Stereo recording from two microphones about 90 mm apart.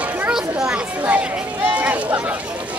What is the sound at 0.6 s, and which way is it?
Speech, 10° right (ahead or behind).